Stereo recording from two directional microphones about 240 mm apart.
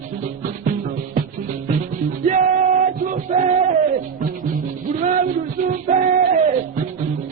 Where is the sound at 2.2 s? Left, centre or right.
Right.